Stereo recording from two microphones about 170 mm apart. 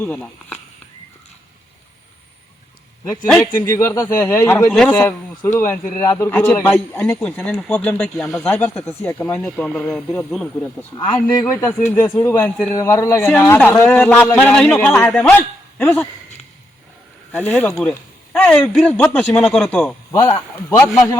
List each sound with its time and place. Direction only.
0.0 s speech: 10° left (ahead or behind)
3.7 s a man's voice: 15° left (ahead or behind)
10.9 s a man's voice: 20° left (ahead or behind)
17.3 s a man's voice: 10° left (ahead or behind)